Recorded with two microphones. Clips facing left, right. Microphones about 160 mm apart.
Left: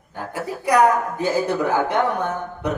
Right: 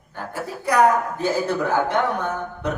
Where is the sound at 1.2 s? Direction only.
15° left (ahead or behind).